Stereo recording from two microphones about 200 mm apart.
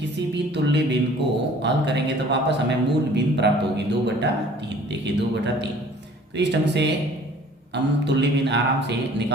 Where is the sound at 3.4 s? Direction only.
60° right (ahead or behind).